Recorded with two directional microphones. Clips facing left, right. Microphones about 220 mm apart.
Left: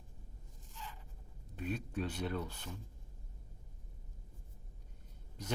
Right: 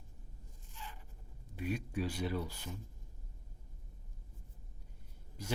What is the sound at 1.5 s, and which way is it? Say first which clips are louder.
Speech: right 1 dB; 10° right (ahead or behind).